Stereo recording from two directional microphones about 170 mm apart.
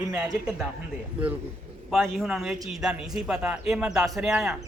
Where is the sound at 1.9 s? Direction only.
Centre (ahead or behind).